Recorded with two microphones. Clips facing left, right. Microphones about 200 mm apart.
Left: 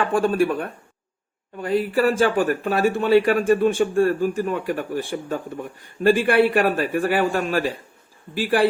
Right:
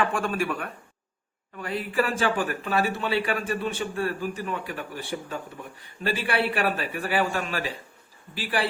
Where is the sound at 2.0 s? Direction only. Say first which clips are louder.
Left 5 dB; 45° left (ahead or behind).